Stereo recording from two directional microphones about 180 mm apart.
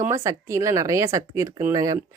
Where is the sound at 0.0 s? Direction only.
15° right (ahead or behind).